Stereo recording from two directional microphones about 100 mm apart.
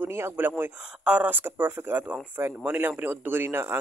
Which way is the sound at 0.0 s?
25° right (ahead or behind).